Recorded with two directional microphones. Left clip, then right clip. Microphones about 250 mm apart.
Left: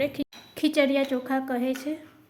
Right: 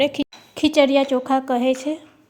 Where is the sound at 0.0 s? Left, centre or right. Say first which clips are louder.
Right 8 dB; right.